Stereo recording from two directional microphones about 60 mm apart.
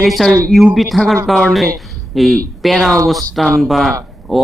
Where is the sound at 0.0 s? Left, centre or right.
Centre.